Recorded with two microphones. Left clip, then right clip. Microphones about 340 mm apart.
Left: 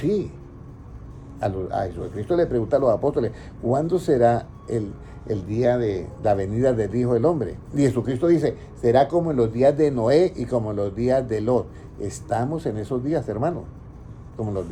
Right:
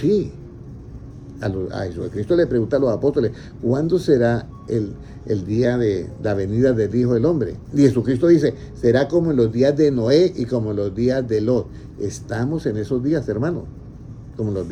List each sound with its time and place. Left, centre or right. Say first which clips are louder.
0.0 s speech: right 5 dB; centre
1.4 s speech: left 1 dB; centre